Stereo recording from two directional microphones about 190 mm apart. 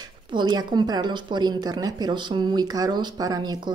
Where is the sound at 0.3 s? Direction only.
20° right (ahead or behind).